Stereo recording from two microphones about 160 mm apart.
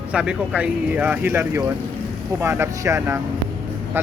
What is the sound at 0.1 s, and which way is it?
A man's voice, 5° right (ahead or behind).